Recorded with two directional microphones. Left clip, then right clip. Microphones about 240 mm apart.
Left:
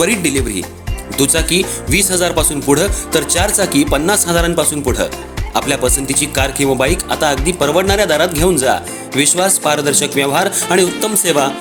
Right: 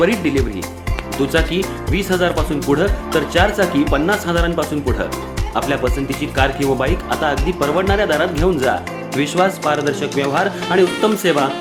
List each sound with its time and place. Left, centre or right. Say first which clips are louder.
0.0 s speech: left 1 dB; left